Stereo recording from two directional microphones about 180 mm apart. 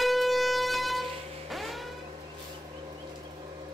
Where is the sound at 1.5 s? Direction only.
Centre (ahead or behind).